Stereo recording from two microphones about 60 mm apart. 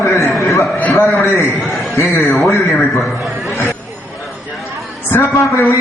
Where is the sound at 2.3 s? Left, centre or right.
Centre.